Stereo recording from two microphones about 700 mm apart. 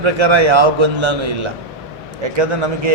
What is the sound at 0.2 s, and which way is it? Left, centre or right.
A man's voice, right.